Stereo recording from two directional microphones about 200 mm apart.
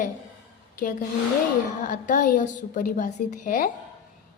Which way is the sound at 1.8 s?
40° left (ahead or behind).